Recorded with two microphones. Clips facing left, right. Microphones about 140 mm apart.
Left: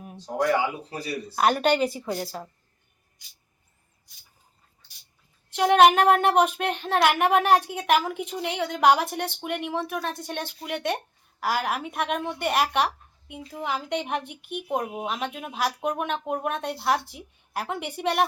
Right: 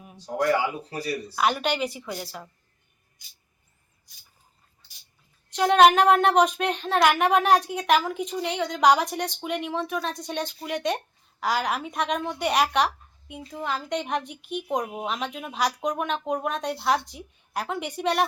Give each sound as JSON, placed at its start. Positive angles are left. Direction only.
{"t": 1.4, "sound": "a woman's voice", "side_deg": 45}
{"t": 5.5, "sound": "a woman's voice", "side_deg": 10}
{"t": 14.3, "sound": "speech", "side_deg": 55}
{"t": 14.7, "sound": "a woman's voice", "side_deg": 5}